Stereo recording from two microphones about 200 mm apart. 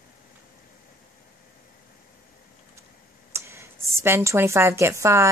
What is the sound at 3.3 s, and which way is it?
A woman's voice, 15° right (ahead or behind).